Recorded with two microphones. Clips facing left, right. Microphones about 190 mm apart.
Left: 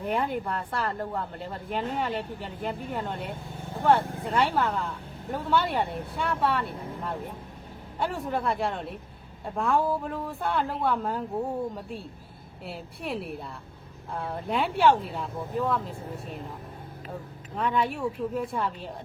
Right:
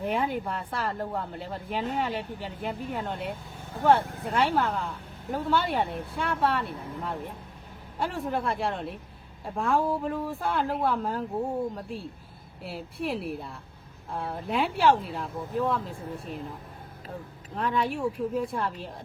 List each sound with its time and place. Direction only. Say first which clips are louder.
0.0 s speech: even; centre (ahead or behind)
4.0 s speech: left 3 dB; 30° left (ahead or behind)
4.4 s speech: even; centre (ahead or behind)
12.6 s speech: right 3 dB; centre (ahead or behind)
17.6 s speech: even; centre (ahead or behind)